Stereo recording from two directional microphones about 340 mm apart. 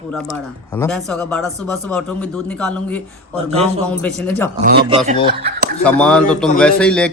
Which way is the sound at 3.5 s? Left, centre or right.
Centre.